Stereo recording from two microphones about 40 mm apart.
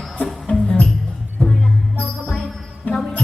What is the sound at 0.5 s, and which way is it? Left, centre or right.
Music, left.